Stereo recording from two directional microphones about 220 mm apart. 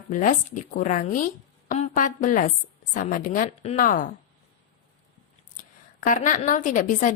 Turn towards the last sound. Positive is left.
turn(degrees=35)  # may be behind; listen again after turning